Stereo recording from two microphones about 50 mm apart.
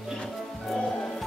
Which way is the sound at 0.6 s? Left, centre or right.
Centre.